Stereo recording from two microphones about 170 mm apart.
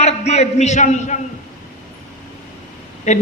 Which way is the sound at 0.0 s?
40° left (ahead or behind).